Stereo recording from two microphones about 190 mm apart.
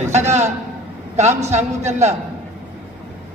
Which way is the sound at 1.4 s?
35° right (ahead or behind).